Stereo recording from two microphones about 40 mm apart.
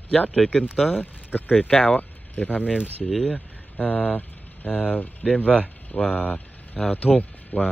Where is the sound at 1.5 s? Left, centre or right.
Left.